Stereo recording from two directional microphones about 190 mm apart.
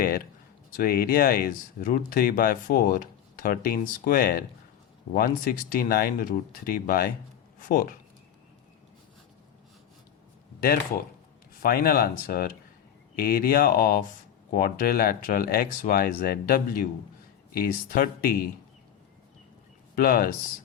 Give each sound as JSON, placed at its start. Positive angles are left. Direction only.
{"t": 0.8, "sound": "speech", "side_deg": 50}
{"t": 11.6, "sound": "speech", "side_deg": 50}
{"t": 20.0, "sound": "speech", "side_deg": 50}